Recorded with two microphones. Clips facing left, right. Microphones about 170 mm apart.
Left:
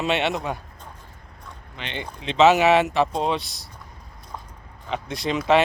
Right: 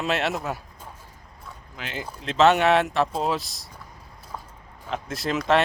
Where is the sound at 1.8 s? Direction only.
5° right (ahead or behind).